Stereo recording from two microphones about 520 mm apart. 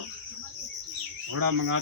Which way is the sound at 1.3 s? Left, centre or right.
Right.